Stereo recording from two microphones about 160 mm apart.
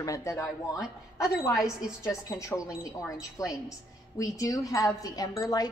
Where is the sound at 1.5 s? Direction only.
5° right (ahead or behind).